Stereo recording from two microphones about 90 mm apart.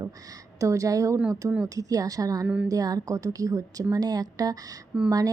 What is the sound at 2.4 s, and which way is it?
Speech, 15° right (ahead or behind).